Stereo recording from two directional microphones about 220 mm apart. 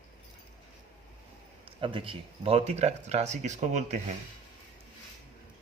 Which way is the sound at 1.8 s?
25° right (ahead or behind).